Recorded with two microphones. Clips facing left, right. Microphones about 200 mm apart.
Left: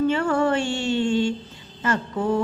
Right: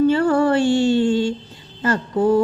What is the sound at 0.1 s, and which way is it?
Music, 35° right (ahead or behind).